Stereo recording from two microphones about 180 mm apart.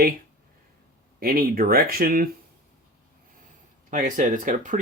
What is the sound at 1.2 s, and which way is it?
Speech, 55° right (ahead or behind).